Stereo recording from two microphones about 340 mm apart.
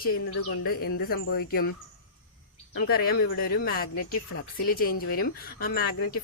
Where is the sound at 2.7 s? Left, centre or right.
Left.